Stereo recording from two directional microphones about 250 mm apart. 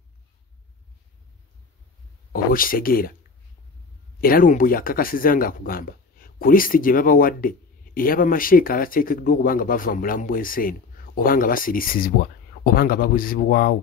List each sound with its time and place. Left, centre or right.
2.3 s speech: left
4.2 s speech: left